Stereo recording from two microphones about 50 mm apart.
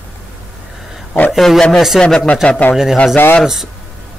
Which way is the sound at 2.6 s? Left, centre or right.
Left.